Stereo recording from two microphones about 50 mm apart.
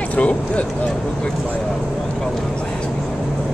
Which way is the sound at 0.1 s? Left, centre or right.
Left.